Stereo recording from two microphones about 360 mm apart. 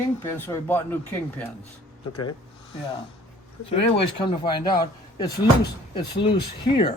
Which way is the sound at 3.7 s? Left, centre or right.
Centre.